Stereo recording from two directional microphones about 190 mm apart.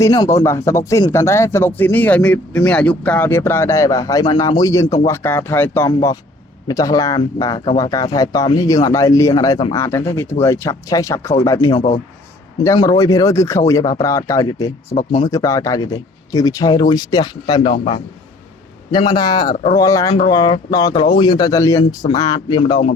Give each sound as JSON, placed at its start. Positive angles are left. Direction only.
{"t": 0.0, "sound": "a man's voice", "side_deg": 15}